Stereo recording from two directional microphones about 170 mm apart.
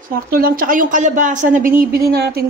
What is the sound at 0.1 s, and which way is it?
A woman's voice, 60° right (ahead or behind).